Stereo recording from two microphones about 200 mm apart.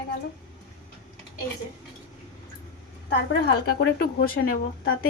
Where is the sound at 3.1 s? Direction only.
55° left (ahead or behind).